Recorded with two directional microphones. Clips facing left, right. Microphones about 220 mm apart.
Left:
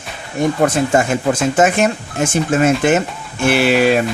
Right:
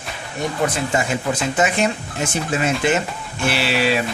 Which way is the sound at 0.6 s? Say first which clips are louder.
Left 5 dB; 50° left (ahead or behind).